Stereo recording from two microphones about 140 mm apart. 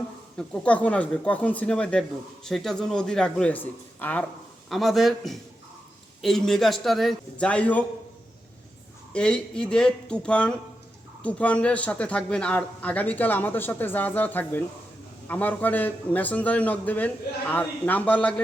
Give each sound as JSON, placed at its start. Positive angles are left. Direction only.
{"t": 0.3, "sound": "speech", "side_deg": 10}
{"t": 4.7, "sound": "a man's voice", "side_deg": 0}
{"t": 9.1, "sound": "speech", "side_deg": 5}